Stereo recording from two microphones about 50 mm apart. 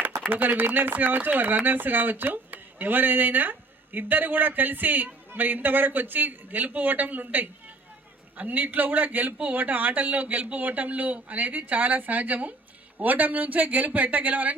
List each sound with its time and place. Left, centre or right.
0.3 s speech: right